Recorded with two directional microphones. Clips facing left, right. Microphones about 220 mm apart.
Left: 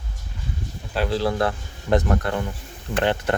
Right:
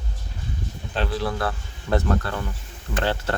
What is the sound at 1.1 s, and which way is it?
Speech, 30° left (ahead or behind).